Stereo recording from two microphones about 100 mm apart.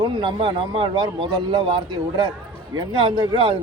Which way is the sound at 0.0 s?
55° right (ahead or behind).